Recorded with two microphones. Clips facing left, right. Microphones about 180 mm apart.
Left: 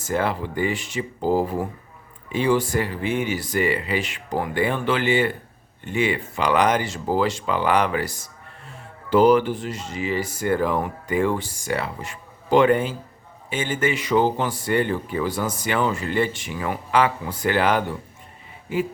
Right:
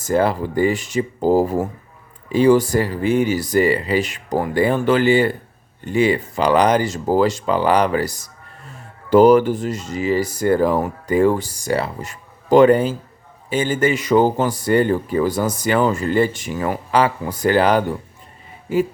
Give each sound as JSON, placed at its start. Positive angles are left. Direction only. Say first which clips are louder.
{"t": 0.0, "sound": "speech", "louder": "right 6 dB", "side_deg": -40}